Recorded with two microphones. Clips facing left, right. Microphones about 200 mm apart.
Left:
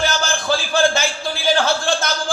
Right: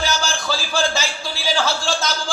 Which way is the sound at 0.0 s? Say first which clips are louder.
Left 2 dB; 55° left (ahead or behind).